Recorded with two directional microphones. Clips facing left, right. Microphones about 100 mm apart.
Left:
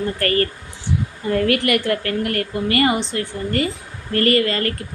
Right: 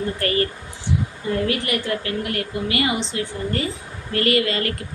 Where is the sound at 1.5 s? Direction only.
65° left (ahead or behind).